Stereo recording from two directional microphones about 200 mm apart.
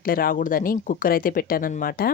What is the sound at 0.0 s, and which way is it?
Speech, 45° left (ahead or behind).